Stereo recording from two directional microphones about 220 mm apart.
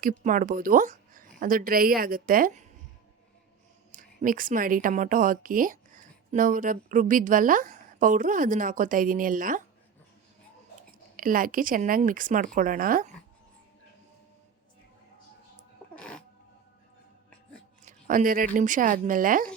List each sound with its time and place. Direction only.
0.0 s a woman's voice: 35° right (ahead or behind)
3.9 s a woman's voice: 40° right (ahead or behind)
11.2 s a woman's voice: 40° right (ahead or behind)
16.0 s cat: 5° left (ahead or behind)
17.8 s a woman's voice: 40° right (ahead or behind)